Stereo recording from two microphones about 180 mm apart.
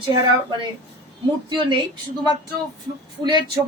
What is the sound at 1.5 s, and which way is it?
Speech, 25° right (ahead or behind).